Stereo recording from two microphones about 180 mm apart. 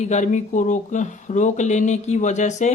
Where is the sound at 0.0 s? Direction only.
40° left (ahead or behind).